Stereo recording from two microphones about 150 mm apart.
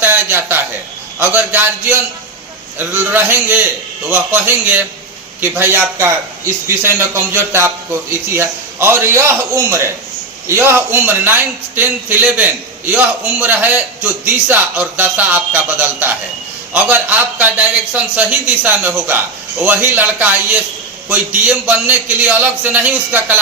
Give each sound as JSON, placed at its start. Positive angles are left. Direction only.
{"t": 0.0, "sound": "a sound", "side_deg": -15}
{"t": 1.2, "sound": "a man's voice", "side_deg": -10}
{"t": 2.7, "sound": "a man's voice", "side_deg": -15}